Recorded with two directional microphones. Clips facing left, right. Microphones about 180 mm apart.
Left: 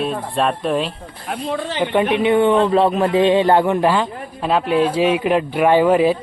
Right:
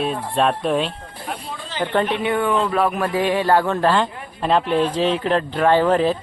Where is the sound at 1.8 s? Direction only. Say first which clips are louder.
Left 3 dB; 10° left (ahead or behind).